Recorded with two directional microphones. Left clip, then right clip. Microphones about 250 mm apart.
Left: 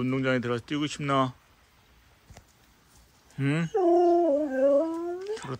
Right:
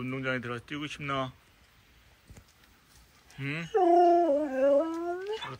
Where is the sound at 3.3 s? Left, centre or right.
Centre.